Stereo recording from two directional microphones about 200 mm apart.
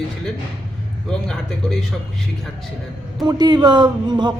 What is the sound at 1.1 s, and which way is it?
Speech, 5° left (ahead or behind).